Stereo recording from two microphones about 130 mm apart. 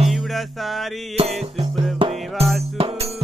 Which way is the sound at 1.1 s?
50° right (ahead or behind).